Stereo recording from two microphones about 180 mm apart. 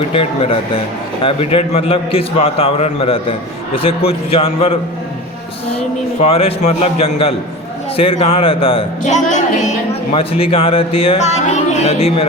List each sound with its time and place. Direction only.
1.2 s a man's voice: 30° left (ahead or behind)
6.2 s a man's voice: 35° left (ahead or behind)